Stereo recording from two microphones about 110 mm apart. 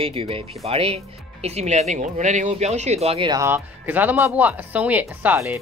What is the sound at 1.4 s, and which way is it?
Speech, 80° right.